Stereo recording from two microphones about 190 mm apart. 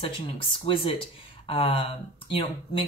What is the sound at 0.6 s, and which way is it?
Speech, 25° left (ahead or behind).